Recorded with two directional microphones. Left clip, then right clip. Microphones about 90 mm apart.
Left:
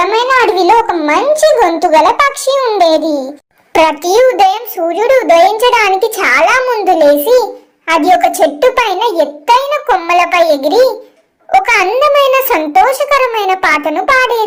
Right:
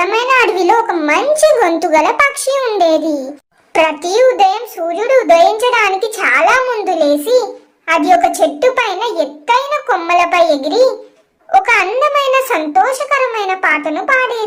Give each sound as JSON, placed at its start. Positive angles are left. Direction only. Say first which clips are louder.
{"t": 0.0, "sound": "a sound", "louder": "left 2 dB", "side_deg": 20}
{"t": 0.9, "sound": "a child's voice", "louder": "left 2 dB", "side_deg": 10}
{"t": 3.7, "sound": "a child's voice", "louder": "left 4 dB", "side_deg": 35}